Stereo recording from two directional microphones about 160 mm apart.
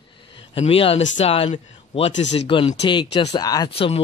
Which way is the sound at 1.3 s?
40° left (ahead or behind).